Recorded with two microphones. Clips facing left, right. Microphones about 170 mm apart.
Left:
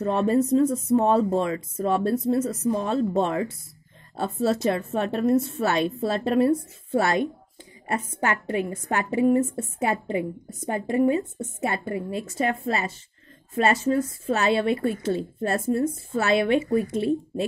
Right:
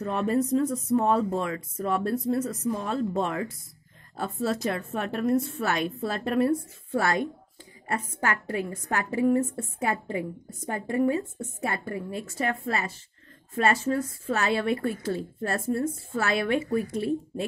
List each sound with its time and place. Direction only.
0.0 s a woman's voice: 30° left (ahead or behind)